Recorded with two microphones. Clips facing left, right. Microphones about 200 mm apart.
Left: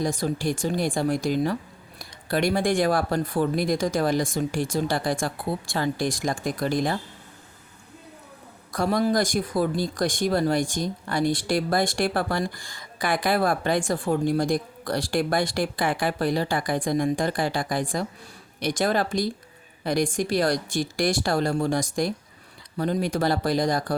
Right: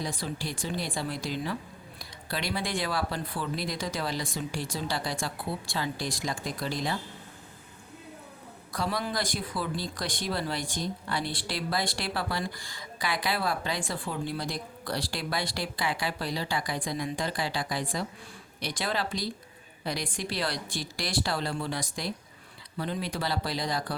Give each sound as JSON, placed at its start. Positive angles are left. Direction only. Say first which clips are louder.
{"t": 0.0, "sound": "speech", "louder": "left 9 dB", "side_deg": 45}
{"t": 8.7, "sound": "speech", "louder": "left 9 dB", "side_deg": 45}